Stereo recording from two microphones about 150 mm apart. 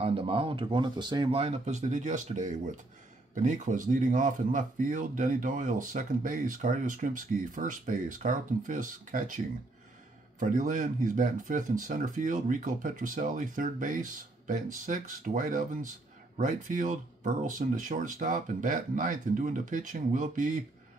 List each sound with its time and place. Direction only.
0.0 s speech: 40° right (ahead or behind); by 9.4 s 60° right (ahead or behind)
10.4 s speech: 60° right (ahead or behind)